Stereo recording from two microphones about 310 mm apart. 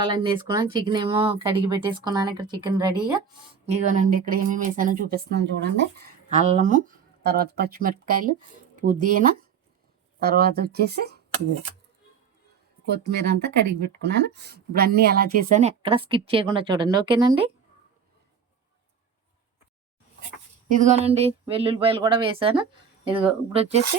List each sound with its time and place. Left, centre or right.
0.0 s speech: centre
3.5 s speech: right
12.9 s speech: right; by 17.5 s centre
20.7 s speech: right